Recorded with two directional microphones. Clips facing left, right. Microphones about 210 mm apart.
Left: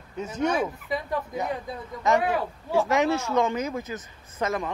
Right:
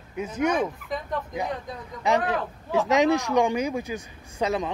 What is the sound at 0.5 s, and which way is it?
Speech, 5° left (ahead or behind).